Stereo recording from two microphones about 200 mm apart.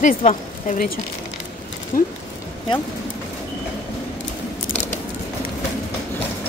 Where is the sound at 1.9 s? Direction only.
45° left (ahead or behind).